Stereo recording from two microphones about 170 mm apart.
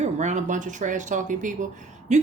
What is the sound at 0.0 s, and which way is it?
Speech, 45° right (ahead or behind).